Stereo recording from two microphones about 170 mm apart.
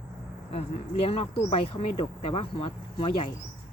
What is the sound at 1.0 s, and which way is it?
Speech, 35° left (ahead or behind).